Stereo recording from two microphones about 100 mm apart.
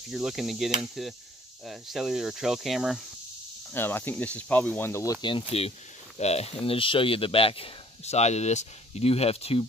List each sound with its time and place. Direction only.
0.1 s speech: 5° right (ahead or behind)
3.7 s speech: 20° left (ahead or behind)
5.5 s speech: 90° left